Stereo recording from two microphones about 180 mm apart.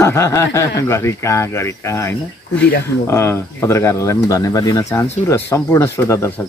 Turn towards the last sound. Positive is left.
turn(degrees=15)  # may be behind; listen again after turning